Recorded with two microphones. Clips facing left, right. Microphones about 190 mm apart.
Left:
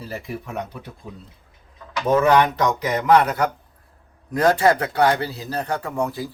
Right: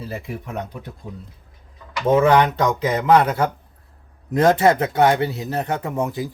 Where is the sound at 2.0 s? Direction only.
25° right (ahead or behind).